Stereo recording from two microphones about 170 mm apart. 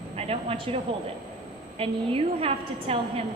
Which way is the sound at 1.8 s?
35° right (ahead or behind).